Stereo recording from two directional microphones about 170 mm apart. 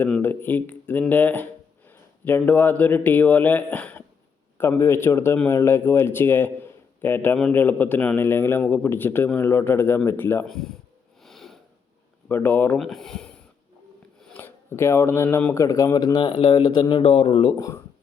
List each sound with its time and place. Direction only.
0.0 s a man's voice: 10° left (ahead or behind)
10.4 s speech: centre (ahead or behind)
11.2 s a sound: centre (ahead or behind)
12.3 s speech: 10° left (ahead or behind); by 17.5 s 30° left (ahead or behind)